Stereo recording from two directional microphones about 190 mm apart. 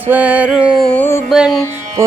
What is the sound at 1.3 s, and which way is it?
Music, centre (ahead or behind).